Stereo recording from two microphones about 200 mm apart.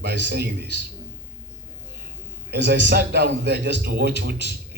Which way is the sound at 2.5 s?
55° right (ahead or behind).